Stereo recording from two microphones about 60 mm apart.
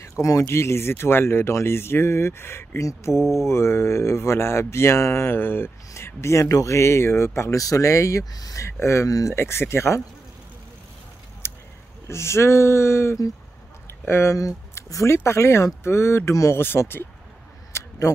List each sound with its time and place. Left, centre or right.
0.2 s speech: left
0.5 s speech: left
3.2 s mantra: centre
3.4 s speech: left
7.6 s speech: left
8.6 s speech: left
11.4 s a sound: left
12.1 s speech: left
13.8 s a sound: left
14.3 s speech: left
17.7 s a sound: left